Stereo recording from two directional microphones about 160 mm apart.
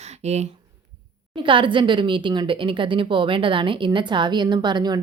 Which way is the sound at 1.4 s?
30° right (ahead or behind).